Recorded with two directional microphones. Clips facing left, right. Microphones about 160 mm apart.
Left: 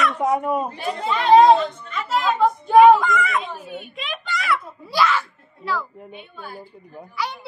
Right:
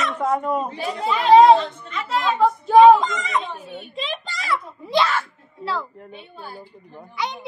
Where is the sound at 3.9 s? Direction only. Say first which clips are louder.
Even; 35° right (ahead or behind).